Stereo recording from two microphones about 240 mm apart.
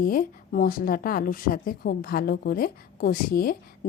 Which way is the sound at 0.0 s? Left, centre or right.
Left.